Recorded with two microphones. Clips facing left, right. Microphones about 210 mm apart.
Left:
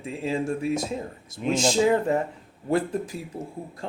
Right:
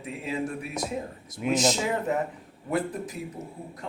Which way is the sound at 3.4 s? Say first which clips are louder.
Left 3 dB; 30° left (ahead or behind).